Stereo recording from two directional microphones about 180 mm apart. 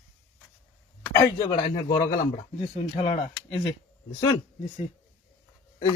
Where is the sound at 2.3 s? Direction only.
35° left (ahead or behind).